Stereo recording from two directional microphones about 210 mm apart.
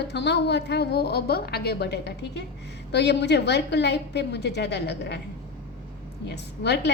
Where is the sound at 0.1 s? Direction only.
55° left (ahead or behind).